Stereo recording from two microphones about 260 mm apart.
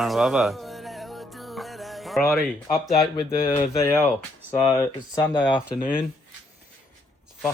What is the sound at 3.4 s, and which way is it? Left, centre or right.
Speech, left.